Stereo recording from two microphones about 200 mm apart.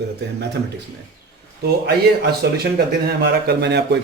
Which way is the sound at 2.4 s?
50° right (ahead or behind).